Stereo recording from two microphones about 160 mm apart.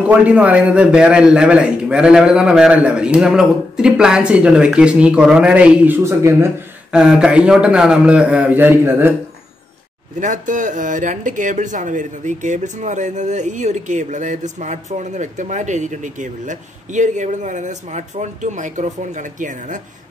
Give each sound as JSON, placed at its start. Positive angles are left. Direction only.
{"t": 0.1, "sound": "a man's voice", "side_deg": -10}
{"t": 6.9, "sound": "a man's voice", "side_deg": -5}
{"t": 10.2, "sound": "speech", "side_deg": -50}